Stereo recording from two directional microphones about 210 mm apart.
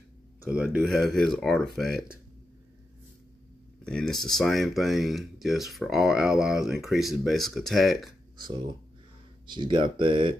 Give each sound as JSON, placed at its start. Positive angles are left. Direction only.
{"t": 0.7, "sound": "speech", "side_deg": 0}
{"t": 3.8, "sound": "speech", "side_deg": 5}
{"t": 9.5, "sound": "speech", "side_deg": -20}